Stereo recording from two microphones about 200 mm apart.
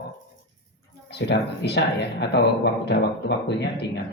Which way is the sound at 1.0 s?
60° left (ahead or behind).